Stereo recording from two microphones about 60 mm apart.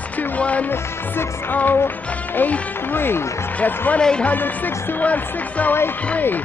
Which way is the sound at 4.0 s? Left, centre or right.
Centre.